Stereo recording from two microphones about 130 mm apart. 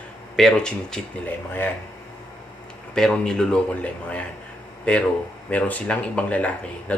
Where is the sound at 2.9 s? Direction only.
5° left (ahead or behind).